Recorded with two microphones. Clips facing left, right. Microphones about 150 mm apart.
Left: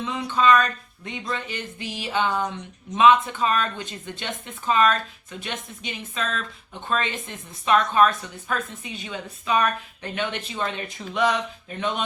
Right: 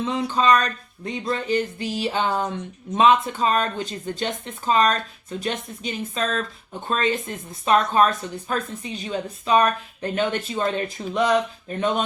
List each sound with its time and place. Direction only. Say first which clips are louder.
0.2 s speech: left 1 dB; 35° right (ahead or behind)